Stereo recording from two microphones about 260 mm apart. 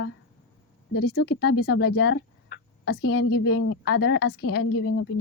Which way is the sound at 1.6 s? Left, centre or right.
Left.